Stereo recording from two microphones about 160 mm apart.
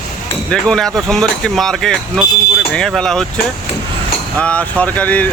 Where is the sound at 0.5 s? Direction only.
5° left (ahead or behind).